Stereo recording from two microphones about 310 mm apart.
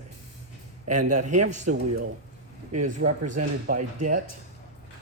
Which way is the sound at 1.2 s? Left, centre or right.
Right.